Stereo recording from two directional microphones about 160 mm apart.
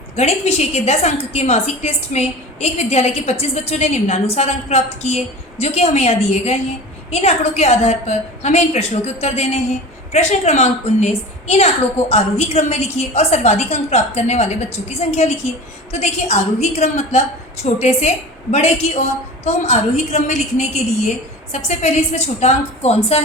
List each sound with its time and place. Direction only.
0.2 s a woman's voice: 40° left (ahead or behind)